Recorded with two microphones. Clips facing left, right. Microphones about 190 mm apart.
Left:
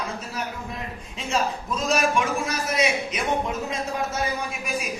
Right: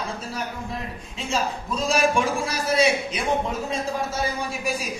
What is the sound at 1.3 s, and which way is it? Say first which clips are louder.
A man's voice: left 1 dB; 30° right (ahead or behind).